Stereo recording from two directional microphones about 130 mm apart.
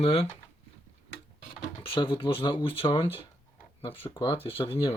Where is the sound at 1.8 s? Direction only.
40° left (ahead or behind).